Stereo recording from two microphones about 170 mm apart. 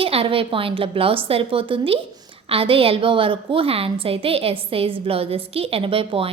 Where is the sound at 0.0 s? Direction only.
35° right (ahead or behind).